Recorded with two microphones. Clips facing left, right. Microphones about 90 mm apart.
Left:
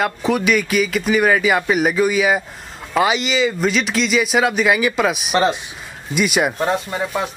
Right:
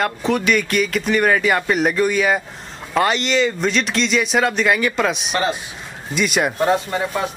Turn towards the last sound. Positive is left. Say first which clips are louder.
# even
turn(degrees=5)  # may be behind; listen again after turning